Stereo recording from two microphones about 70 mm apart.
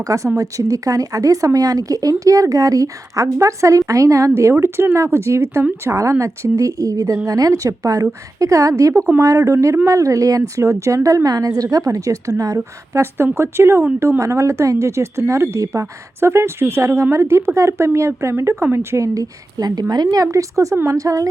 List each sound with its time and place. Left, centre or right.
0.0 s a woman's voice: right
12.9 s a woman's voice: right
20.2 s a woman's voice: right